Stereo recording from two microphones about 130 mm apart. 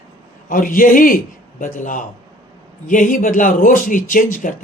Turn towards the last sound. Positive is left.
turn(degrees=90)